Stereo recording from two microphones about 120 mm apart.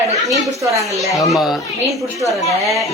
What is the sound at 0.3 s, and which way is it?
Speech, 25° right (ahead or behind).